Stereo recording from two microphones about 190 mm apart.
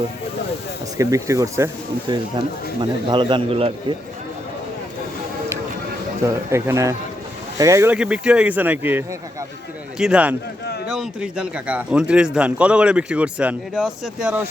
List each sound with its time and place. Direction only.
0.9 s speech: 15° right (ahead or behind)
6.5 s speech: 15° right (ahead or behind)